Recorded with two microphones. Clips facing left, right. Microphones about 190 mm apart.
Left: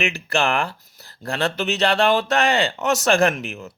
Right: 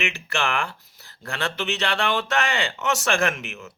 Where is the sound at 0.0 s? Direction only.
35° left (ahead or behind).